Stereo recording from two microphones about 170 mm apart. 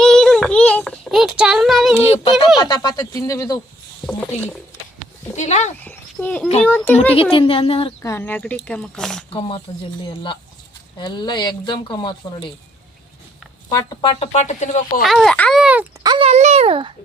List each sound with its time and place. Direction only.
0.0 s child singing: 5° left (ahead or behind)
2.0 s speech: 40° left (ahead or behind)
2.6 s speech: 25° left (ahead or behind)
4.0 s a child's voice: 5° left (ahead or behind)
5.4 s speech: 45° left (ahead or behind)
5.8 s speech: 10° left (ahead or behind)
7.1 s speech: 35° left (ahead or behind)
8.0 s speech: 15° left (ahead or behind)
9.7 s speech: 35° left (ahead or behind)
10.9 s speech: 25° left (ahead or behind)
13.7 s speech: 25° left (ahead or behind); by 15.0 s 45° left (ahead or behind)
15.0 s a child's voice: centre (ahead or behind)
16.0 s a child's voice: 30° right (ahead or behind)